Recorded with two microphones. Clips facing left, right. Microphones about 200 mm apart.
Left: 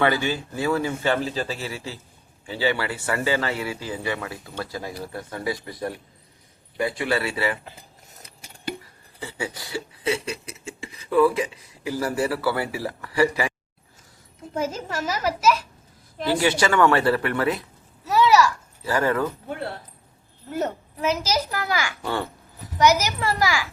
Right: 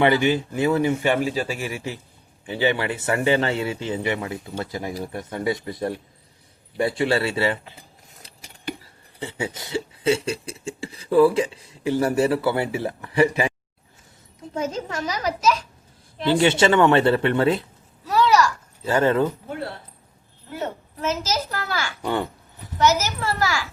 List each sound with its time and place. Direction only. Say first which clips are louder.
0.0 s speech: right 4 dB; 20° right (ahead or behind)
8.8 s speech: right 4 dB; 25° right (ahead or behind)
14.5 s a child's voice: even; 5° left (ahead or behind)
16.2 s speech: right 4 dB; 25° right (ahead or behind)
18.0 s a sound: left 1 dB; 5° left (ahead or behind)
18.9 s speech: right 3 dB; 25° right (ahead or behind)
21.0 s a child's voice: left 1 dB; 10° left (ahead or behind)
22.0 s babbling: right 3 dB; 15° right (ahead or behind)
22.8 s a child's voice: left 1 dB; 15° left (ahead or behind)